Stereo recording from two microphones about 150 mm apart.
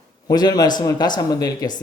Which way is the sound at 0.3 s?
25° left (ahead or behind).